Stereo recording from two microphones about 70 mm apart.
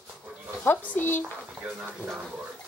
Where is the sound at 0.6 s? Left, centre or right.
Left.